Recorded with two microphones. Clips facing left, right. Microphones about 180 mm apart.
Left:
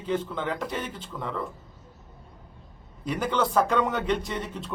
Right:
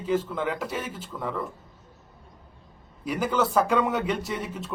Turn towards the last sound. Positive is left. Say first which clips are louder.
# right 1 dB
turn(degrees=-10)  # may be behind; listen again after turning